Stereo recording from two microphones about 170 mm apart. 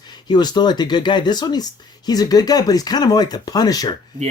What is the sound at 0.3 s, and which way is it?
Speech, 25° left (ahead or behind).